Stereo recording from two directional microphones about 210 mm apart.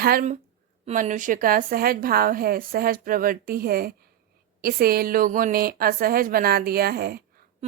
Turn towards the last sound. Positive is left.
turn(degrees=-45)  # may be behind; listen again after turning